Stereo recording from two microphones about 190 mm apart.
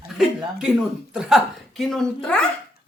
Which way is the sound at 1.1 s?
5° right (ahead or behind).